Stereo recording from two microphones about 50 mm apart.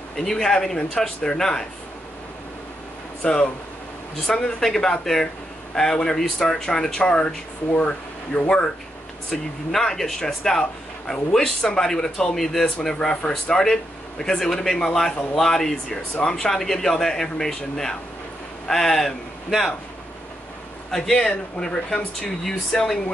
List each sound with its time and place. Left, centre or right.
0.1 s speech: centre
3.2 s speech: left
20.9 s speech: centre